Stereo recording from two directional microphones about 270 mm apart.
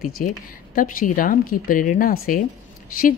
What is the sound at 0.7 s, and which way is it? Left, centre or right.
A woman's voice, left.